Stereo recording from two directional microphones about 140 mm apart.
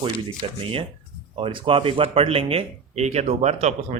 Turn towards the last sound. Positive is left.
turn(degrees=-55)  # may be behind; listen again after turning